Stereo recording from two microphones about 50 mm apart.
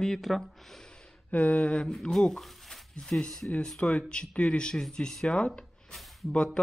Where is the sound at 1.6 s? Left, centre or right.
Centre.